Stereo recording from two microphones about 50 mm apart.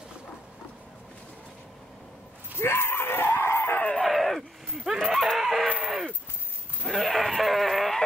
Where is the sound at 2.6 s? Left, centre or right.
Left.